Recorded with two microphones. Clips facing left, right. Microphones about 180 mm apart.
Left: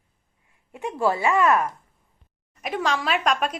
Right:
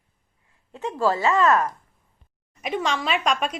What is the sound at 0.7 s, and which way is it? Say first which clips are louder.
Speech: right 1 dB; 15° left (ahead or behind).